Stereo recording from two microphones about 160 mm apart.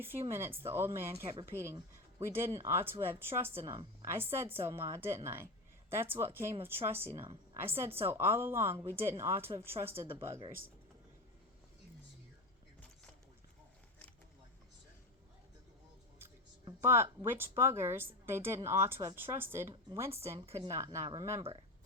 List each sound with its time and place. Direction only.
0.0 s a woman's voice: 15° right (ahead or behind)
16.8 s a woman's voice: 15° right (ahead or behind)